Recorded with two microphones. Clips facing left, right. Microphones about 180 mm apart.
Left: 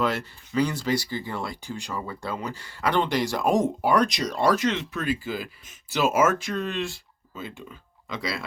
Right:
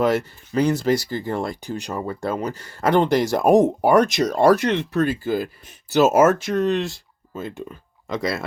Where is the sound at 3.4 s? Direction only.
60° right (ahead or behind).